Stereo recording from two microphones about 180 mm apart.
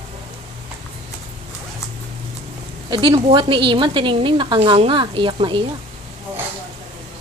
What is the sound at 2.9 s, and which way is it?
A woman's voice, 25° right (ahead or behind).